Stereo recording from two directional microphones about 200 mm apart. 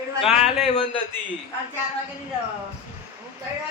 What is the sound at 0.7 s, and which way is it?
Speech, 25° left (ahead or behind).